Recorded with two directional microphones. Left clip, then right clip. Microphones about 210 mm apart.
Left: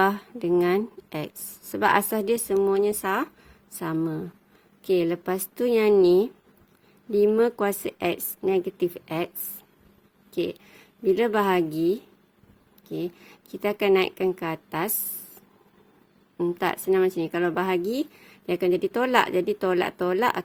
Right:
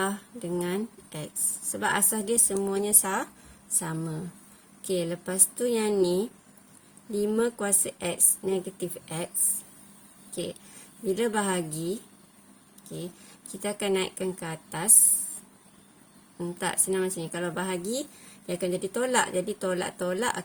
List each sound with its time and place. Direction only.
0.0 s speech: 40° left (ahead or behind)
10.3 s speech: 40° left (ahead or behind)
12.9 s speech: 40° left (ahead or behind)
16.4 s speech: 35° left (ahead or behind)